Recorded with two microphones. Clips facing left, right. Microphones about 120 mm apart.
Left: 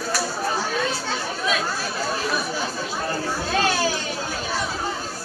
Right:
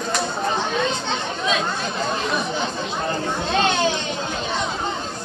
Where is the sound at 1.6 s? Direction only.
5° left (ahead or behind).